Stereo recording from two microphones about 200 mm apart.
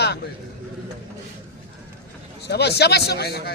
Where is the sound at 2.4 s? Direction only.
55° left (ahead or behind).